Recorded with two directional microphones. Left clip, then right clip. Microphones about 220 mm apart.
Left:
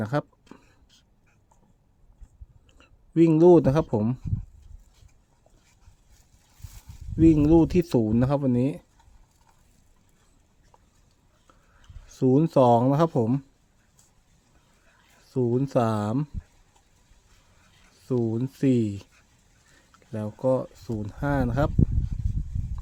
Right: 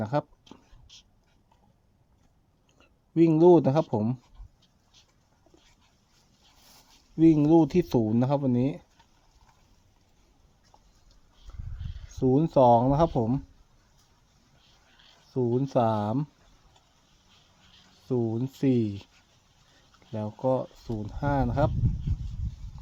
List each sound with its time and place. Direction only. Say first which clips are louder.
0.0 s a sound: even; 20° left (ahead or behind)
2.7 s speech: left 2 dB; 20° left (ahead or behind)
7.2 s speech: left 2 dB; 15° left (ahead or behind)
12.1 s speech: left 2 dB; 25° left (ahead or behind)
15.3 s speech: left 2 dB; 20° left (ahead or behind)
18.1 s speech: left 2 dB; 20° left (ahead or behind)
20.1 s speech: left 2 dB; 20° left (ahead or behind)